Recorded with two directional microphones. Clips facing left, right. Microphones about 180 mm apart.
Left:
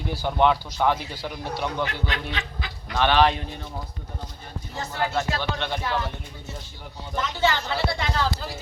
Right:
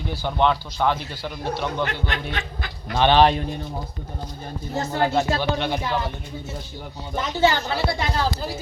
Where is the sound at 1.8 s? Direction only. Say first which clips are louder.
Right 2 dB; 50° right (ahead or behind).